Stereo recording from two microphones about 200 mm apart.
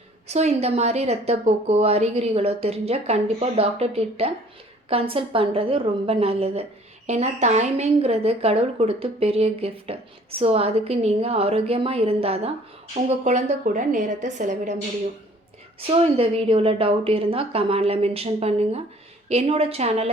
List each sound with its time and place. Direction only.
0.3 s a woman's voice: 35° right (ahead or behind)
15.9 s a woman's voice: 30° right (ahead or behind)